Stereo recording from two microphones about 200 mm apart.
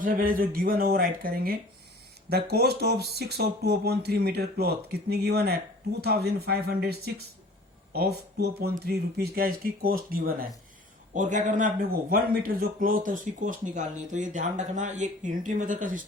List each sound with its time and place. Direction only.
0.0 s speech: 45° right (ahead or behind)